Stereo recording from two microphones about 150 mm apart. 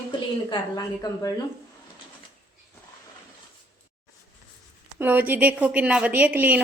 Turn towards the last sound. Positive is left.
turn(degrees=-10)  # may be behind; listen again after turning